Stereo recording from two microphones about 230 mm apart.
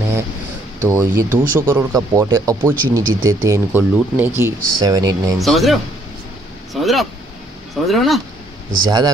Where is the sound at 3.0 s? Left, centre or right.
Right.